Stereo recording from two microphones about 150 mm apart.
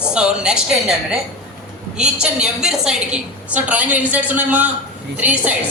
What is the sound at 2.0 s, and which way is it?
A woman's voice, 5° right (ahead or behind).